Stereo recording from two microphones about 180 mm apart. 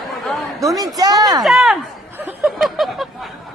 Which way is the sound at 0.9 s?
20° right (ahead or behind).